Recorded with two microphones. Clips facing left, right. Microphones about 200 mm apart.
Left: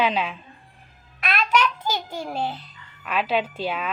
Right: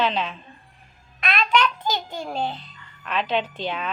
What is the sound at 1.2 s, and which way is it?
Babbling, 5° left (ahead or behind).